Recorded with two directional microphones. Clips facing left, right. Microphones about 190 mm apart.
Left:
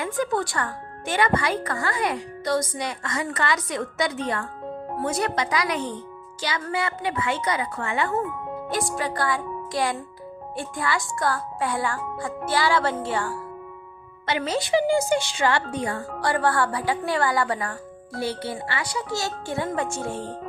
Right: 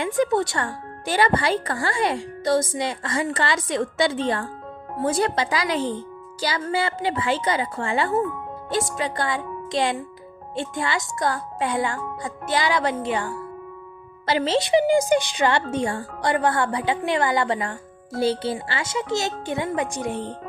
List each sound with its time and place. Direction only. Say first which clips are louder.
0.0 s speech: right 4 dB; 25° right (ahead or behind)
14.3 s speech: right 4 dB; 30° right (ahead or behind)